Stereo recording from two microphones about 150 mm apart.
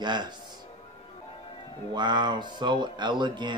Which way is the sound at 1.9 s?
30° right (ahead or behind).